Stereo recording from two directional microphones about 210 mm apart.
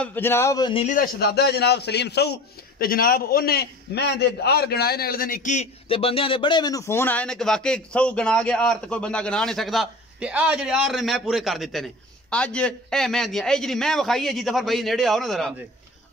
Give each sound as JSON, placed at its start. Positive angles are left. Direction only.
{"t": 0.0, "sound": "a man's voice", "side_deg": 10}
{"t": 0.8, "sound": "a man's voice", "side_deg": 40}